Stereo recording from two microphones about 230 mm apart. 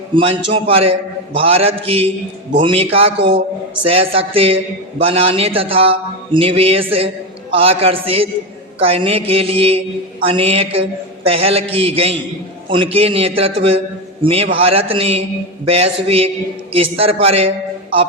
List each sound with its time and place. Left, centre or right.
0.1 s a man's voice: right